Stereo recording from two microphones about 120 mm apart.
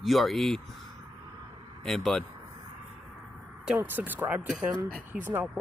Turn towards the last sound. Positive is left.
turn(degrees=-15)  # may be behind; listen again after turning